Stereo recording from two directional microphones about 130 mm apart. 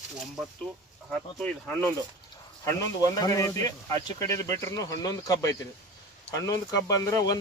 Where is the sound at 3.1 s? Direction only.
25° left (ahead or behind).